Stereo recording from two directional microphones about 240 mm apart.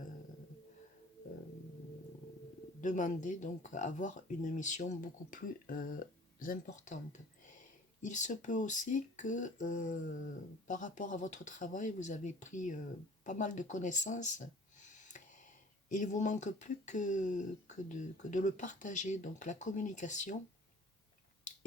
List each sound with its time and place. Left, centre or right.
2.8 s speech: left
13.2 s a sound: left
15.9 s speech: left